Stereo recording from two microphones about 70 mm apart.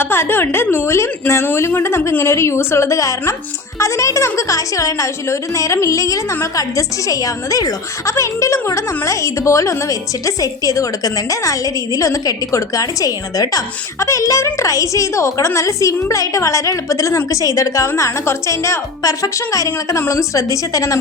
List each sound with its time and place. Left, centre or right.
0.0 s a woman's voice: left